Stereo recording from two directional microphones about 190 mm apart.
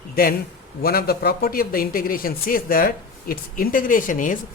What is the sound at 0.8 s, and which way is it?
Speech, 55° left (ahead or behind).